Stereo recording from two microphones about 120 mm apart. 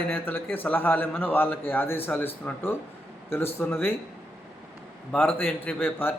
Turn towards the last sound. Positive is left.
turn(degrees=15)  # may be behind; listen again after turning